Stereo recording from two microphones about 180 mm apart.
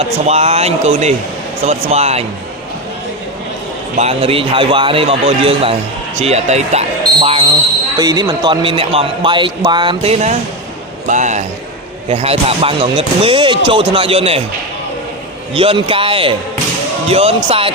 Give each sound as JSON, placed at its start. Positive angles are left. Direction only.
{"t": 0.0, "sound": "speech", "side_deg": -35}
{"t": 3.9, "sound": "speech", "side_deg": -35}
{"t": 6.2, "sound": "basketball bounce", "side_deg": -35}
{"t": 7.9, "sound": "a man's voice", "side_deg": -20}
{"t": 15.5, "sound": "a man's voice", "side_deg": -30}